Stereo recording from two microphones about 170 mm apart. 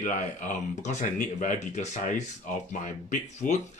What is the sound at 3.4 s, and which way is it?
Speech, 55° left (ahead or behind).